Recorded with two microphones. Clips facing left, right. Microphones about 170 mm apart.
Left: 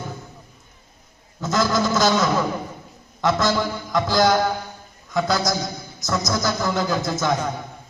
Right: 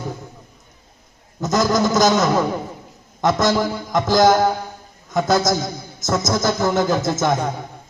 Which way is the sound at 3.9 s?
20° right (ahead or behind).